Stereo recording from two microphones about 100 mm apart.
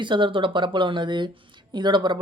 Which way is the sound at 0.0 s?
55° right (ahead or behind).